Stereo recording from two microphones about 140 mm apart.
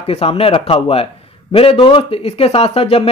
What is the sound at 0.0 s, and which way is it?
Speech, 45° left (ahead or behind).